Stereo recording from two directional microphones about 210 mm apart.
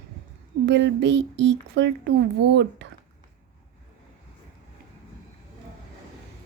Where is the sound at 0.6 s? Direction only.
55° right (ahead or behind).